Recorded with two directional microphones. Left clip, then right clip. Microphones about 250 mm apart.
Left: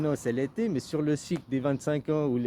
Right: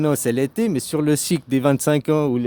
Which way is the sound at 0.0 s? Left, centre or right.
Right.